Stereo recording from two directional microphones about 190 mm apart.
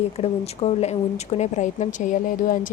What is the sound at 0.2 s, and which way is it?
A woman's voice, 30° left (ahead or behind).